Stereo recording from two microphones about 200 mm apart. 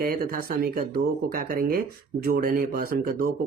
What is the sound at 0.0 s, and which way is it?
Speech, 45° right (ahead or behind).